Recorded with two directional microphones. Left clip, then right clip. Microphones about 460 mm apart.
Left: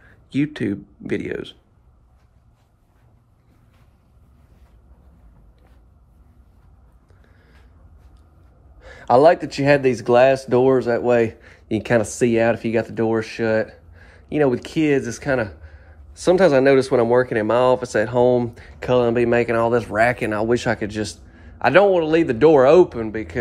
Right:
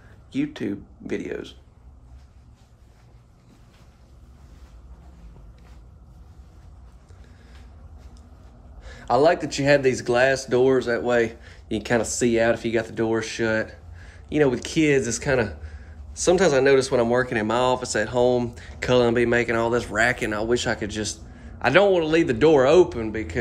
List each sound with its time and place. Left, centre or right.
0.3 s speech: centre
8.8 s speech: centre